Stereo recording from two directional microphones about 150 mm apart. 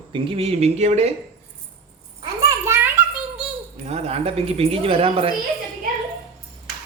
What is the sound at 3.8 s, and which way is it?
A man's voice, 45° right (ahead or behind).